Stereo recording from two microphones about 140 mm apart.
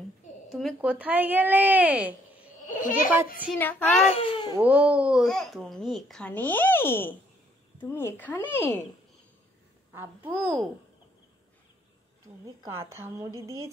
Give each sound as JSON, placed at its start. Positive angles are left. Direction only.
{"t": 0.5, "sound": "a sound", "side_deg": 0}
{"t": 0.7, "sound": "a woman's voice", "side_deg": -10}
{"t": 2.6, "sound": "a child's voice", "side_deg": 70}
{"t": 3.5, "sound": "speech", "side_deg": 15}
{"t": 4.0, "sound": "speech", "side_deg": 45}
{"t": 4.6, "sound": "a child's voice", "side_deg": -10}
{"t": 9.9, "sound": "a woman's voice", "side_deg": -15}
{"t": 12.6, "sound": "a woman's voice", "side_deg": -20}